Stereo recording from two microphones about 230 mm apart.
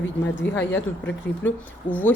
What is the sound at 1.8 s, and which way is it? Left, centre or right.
Speech, centre.